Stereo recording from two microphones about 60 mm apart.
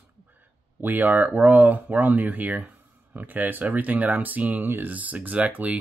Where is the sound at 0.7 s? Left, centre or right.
Right.